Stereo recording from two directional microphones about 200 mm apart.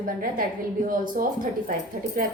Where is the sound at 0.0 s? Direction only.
45° right (ahead or behind).